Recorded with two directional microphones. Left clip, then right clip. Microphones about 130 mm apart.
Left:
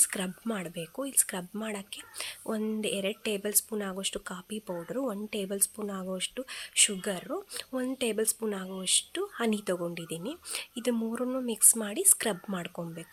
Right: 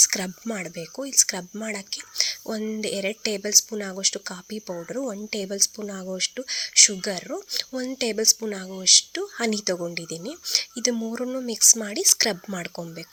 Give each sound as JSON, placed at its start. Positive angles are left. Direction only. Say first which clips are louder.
{"t": 0.0, "sound": "speech", "louder": "right 11 dB", "side_deg": -30}